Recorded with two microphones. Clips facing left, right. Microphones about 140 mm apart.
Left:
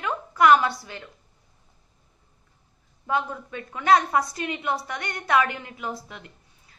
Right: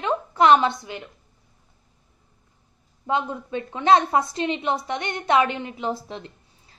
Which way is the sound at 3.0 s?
20° right (ahead or behind).